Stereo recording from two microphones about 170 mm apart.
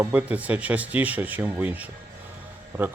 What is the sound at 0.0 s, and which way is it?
A man's voice, 10° right (ahead or behind).